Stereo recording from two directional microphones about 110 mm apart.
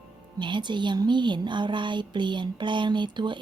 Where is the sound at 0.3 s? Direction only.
45° right (ahead or behind).